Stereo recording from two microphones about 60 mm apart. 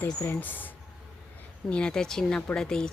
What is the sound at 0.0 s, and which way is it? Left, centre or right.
Speech, left.